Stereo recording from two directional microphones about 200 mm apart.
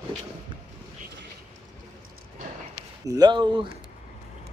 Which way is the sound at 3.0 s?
20° right (ahead or behind).